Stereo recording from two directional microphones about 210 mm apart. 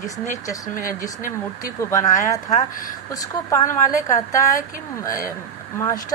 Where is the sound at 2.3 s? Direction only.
15° left (ahead or behind).